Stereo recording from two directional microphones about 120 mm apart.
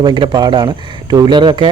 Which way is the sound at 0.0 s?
40° right (ahead or behind).